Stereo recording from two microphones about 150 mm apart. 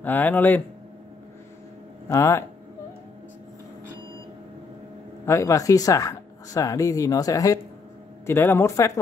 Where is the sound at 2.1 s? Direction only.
20° left (ahead or behind).